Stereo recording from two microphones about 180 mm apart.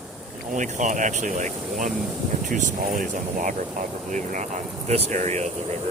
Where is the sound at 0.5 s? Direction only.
45° right (ahead or behind).